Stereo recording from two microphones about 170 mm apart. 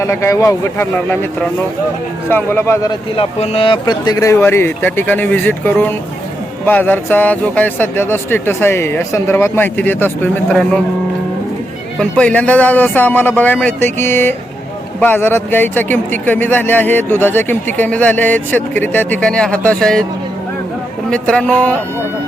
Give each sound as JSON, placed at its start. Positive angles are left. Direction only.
{"t": 0.0, "sound": "a man's voice", "side_deg": 15}
{"t": 2.9, "sound": "a man's voice", "side_deg": 35}
{"t": 11.9, "sound": "a man's voice", "side_deg": 5}
{"t": 21.1, "sound": "a man's voice", "side_deg": 5}